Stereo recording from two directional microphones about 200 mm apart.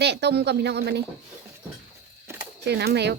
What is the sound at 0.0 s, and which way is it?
Speech, 55° right (ahead or behind).